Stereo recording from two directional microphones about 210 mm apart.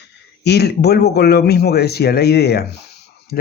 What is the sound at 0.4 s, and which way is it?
Speech, 50° left (ahead or behind).